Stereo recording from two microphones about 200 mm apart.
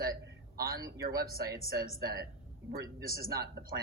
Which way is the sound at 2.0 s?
50° right (ahead or behind).